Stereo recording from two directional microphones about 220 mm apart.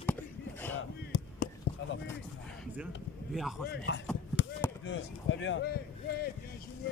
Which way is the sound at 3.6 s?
55° left (ahead or behind).